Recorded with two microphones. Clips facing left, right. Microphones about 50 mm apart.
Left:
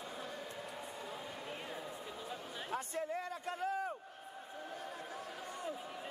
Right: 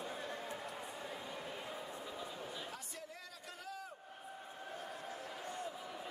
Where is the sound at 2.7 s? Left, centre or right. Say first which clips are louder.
Left 10 dB; left.